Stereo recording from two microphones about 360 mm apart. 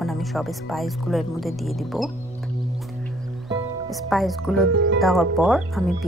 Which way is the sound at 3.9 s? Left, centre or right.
Centre.